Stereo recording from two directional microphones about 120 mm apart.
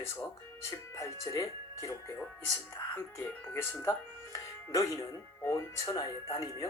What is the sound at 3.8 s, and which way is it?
Speech, 25° left (ahead or behind).